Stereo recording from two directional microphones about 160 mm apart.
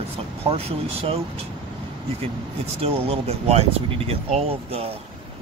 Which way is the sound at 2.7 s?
35° right (ahead or behind).